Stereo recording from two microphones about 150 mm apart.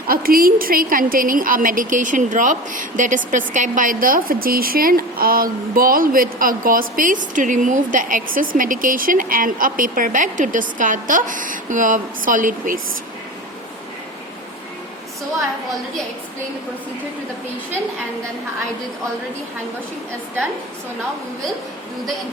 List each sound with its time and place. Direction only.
0.1 s a woman's voice: 75° right (ahead or behind)